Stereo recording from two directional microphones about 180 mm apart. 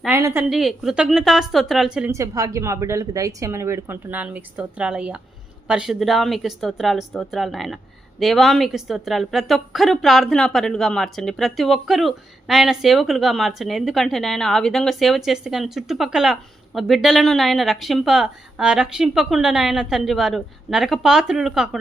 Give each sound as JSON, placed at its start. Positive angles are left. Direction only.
{"t": 0.0, "sound": "a sound", "side_deg": -15}
{"t": 0.5, "sound": "a woman's voice", "side_deg": 0}
{"t": 2.1, "sound": "a woman's voice", "side_deg": -15}